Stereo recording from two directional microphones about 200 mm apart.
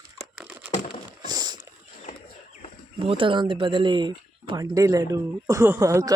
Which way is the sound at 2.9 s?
25° right (ahead or behind).